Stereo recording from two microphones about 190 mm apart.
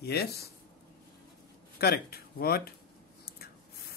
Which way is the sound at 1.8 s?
55° left (ahead or behind).